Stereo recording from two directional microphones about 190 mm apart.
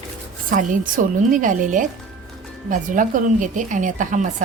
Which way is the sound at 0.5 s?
45° right (ahead or behind).